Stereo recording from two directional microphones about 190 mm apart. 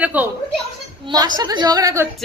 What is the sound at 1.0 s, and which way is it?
A woman's voice, 20° right (ahead or behind).